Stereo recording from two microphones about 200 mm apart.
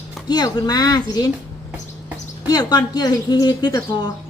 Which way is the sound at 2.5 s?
20° left (ahead or behind).